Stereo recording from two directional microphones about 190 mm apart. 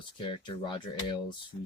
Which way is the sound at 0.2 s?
25° left (ahead or behind).